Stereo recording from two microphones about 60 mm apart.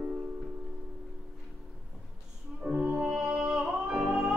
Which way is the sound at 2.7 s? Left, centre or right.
Centre.